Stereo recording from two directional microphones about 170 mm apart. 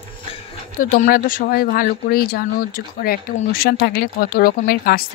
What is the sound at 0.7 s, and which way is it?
Speech, 50° left (ahead or behind).